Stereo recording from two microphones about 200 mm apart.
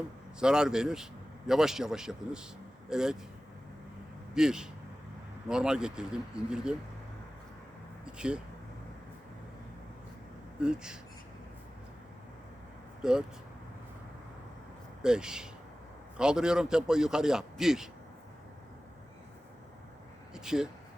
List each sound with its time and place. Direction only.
0.3 s a man's voice: 5° right (ahead or behind)
4.4 s a man's voice: 5° right (ahead or behind)
8.0 s speech: 5° right (ahead or behind)
10.6 s a man's voice: 5° right (ahead or behind)
13.0 s speech: 5° right (ahead or behind)
15.0 s a man's voice: 5° right (ahead or behind)
20.3 s a sound: 5° right (ahead or behind)